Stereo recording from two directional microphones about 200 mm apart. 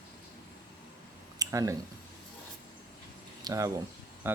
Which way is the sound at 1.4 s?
15° right (ahead or behind).